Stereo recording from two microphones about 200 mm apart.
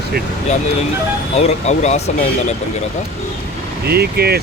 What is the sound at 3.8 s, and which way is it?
Speech, 50° right (ahead or behind).